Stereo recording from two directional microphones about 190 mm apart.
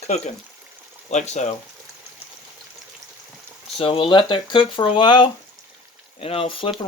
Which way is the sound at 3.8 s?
30° left (ahead or behind).